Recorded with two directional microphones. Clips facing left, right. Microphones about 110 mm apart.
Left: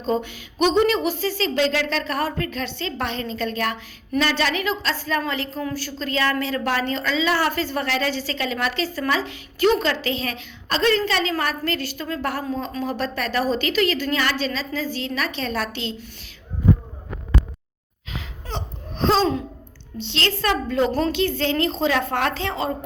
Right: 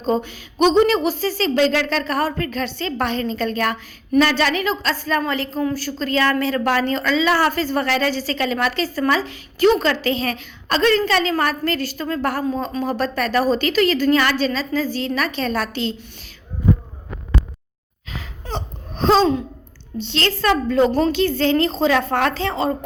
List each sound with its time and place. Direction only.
0.0 s a woman's voice: 35° right (ahead or behind)
18.1 s laughter: 40° right (ahead or behind)
20.0 s speech: 40° right (ahead or behind)